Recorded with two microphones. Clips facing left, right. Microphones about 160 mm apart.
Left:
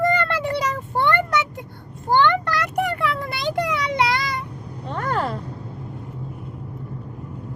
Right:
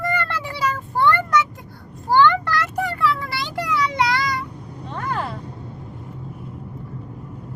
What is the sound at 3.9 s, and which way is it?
Child singing, 20° left (ahead or behind).